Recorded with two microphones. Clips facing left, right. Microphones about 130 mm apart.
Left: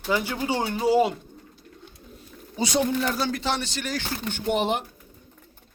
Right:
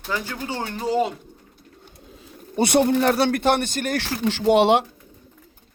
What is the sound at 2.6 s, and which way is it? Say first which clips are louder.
Speech: right 6 dB; 60° right (ahead or behind).